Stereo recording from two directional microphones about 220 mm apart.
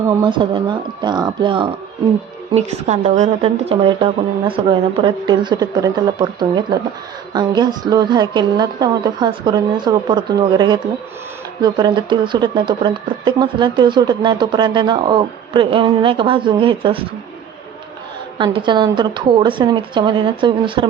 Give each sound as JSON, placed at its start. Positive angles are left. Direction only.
{"t": 0.2, "sound": "speech", "side_deg": -20}
{"t": 18.3, "sound": "speech", "side_deg": -20}